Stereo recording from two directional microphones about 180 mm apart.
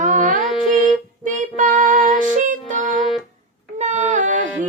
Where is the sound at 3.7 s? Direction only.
40° right (ahead or behind).